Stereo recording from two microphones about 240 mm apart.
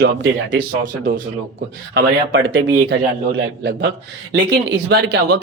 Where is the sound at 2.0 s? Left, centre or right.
Right.